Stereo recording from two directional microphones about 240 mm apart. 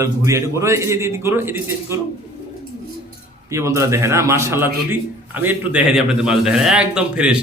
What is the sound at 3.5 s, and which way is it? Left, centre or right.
A man's voice, centre.